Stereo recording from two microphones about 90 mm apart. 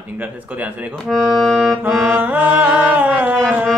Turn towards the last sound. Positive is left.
turn(degrees=-20)  # may be behind; listen again after turning